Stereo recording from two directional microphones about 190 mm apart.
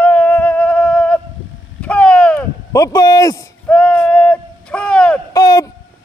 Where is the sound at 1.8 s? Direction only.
5° left (ahead or behind).